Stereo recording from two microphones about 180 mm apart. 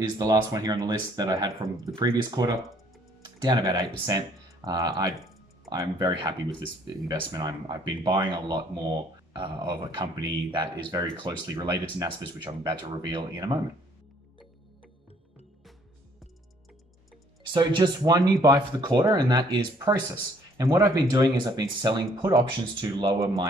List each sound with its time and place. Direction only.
0.2 s speech: 20° right (ahead or behind)
17.5 s speech: 25° right (ahead or behind)